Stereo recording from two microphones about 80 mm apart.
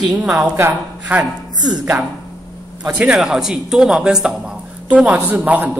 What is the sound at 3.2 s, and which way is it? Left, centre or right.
A man's voice, centre.